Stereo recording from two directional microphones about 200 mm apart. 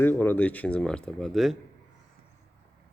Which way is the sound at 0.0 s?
10° left (ahead or behind).